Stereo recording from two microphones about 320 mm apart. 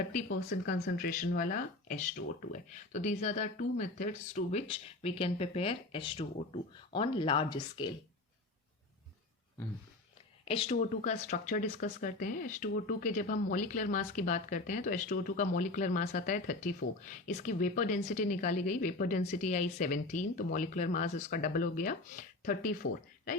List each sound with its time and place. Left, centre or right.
0.1 s speech: left
10.4 s speech: centre